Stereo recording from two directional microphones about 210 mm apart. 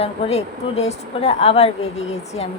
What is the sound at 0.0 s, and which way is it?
A woman's voice, 30° left (ahead or behind).